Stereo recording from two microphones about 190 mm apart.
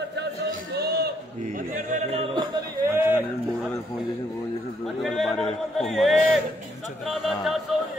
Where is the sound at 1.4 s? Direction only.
40° right (ahead or behind).